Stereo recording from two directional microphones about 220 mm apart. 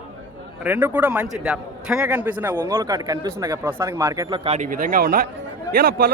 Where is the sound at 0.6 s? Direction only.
10° right (ahead or behind).